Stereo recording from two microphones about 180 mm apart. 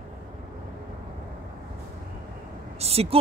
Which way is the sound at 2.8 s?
35° right (ahead or behind).